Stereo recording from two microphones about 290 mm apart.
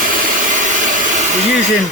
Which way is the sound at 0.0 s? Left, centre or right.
Right.